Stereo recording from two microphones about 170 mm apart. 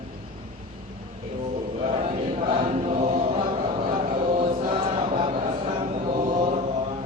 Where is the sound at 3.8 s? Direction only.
50° right (ahead or behind).